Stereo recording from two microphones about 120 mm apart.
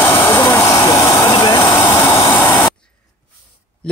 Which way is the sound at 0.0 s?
20° left (ahead or behind).